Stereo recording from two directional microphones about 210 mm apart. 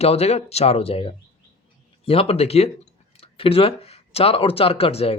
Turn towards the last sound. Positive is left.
turn(degrees=30)  # may be behind; listen again after turning